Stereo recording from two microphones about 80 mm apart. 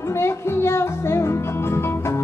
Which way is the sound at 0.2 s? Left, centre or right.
Left.